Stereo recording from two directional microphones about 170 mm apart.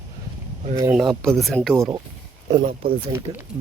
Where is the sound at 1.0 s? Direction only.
Centre (ahead or behind).